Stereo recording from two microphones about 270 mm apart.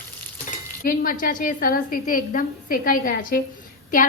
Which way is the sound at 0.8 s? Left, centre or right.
Left.